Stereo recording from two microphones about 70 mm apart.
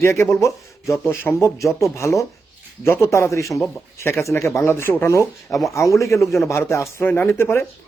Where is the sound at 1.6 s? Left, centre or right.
Left.